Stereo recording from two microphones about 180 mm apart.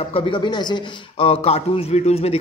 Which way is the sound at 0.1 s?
30° left (ahead or behind).